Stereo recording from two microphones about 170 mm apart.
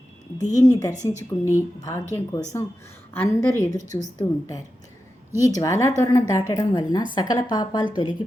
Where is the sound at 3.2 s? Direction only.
15° left (ahead or behind).